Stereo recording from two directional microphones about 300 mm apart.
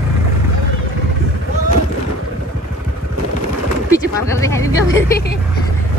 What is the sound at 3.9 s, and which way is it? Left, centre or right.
Speech, centre.